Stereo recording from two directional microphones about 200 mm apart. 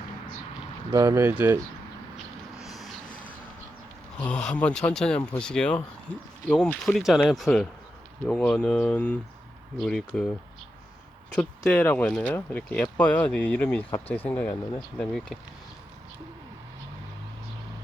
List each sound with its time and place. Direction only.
0.9 s speech: 15° right (ahead or behind)
2.1 s a sound: centre (ahead or behind)
4.2 s speech: 5° left (ahead or behind)
11.3 s speech: 5° left (ahead or behind)
14.5 s speech: 20° left (ahead or behind)
14.9 s speech: 5° left (ahead or behind)